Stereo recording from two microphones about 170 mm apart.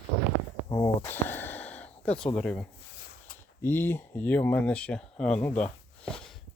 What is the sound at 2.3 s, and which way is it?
Speech, 5° left (ahead or behind).